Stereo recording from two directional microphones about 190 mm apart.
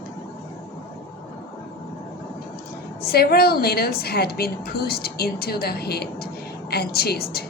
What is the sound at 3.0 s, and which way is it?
A woman's voice, 55° left (ahead or behind).